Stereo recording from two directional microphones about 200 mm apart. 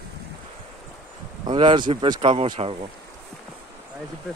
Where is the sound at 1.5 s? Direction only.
25° right (ahead or behind).